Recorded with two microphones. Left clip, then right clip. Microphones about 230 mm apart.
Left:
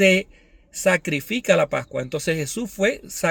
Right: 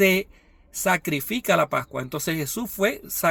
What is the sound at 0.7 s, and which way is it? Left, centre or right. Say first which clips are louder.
Speech: left 3 dB; right.